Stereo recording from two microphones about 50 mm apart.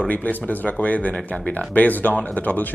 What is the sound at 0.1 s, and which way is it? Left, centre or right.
Speech, left.